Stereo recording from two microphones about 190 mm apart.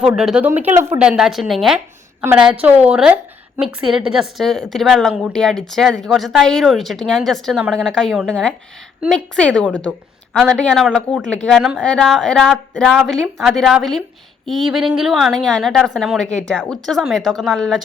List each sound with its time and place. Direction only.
0.0 s a woman's voice: 5° right (ahead or behind)
1.0 s a woman's voice: 5° right (ahead or behind)